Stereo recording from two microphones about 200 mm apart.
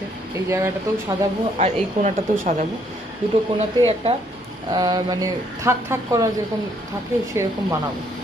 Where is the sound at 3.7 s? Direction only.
30° right (ahead or behind).